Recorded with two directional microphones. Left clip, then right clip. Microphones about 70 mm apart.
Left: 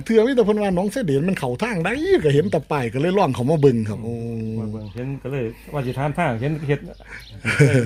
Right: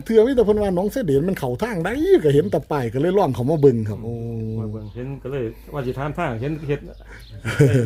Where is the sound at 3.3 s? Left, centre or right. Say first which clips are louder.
Right 1 dB; right.